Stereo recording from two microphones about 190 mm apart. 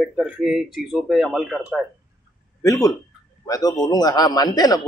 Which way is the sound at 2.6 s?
15° left (ahead or behind).